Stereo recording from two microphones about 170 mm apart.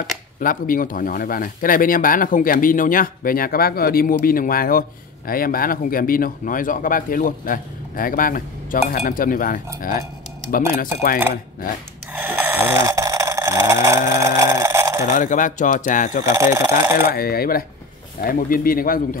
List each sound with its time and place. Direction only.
0.4 s speech: 55° left (ahead or behind)
12.1 s snoring: 10° right (ahead or behind)
15.0 s speech: 50° left (ahead or behind)
16.3 s speech: 15° right (ahead or behind)
17.1 s speech: 60° left (ahead or behind)